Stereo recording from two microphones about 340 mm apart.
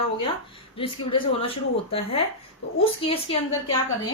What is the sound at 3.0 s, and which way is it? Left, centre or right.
Speech, centre.